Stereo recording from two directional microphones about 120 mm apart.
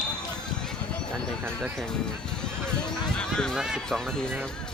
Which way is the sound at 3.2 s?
5° left (ahead or behind).